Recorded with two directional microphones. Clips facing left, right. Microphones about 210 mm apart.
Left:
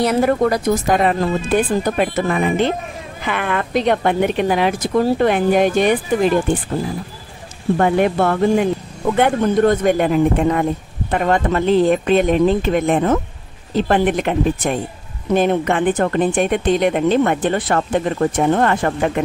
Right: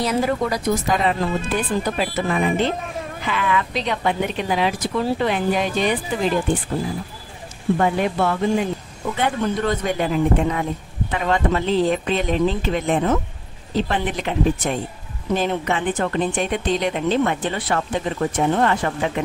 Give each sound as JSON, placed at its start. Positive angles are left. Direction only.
{"t": 0.0, "sound": "speech", "side_deg": 60}
{"t": 7.7, "sound": "speech", "side_deg": 55}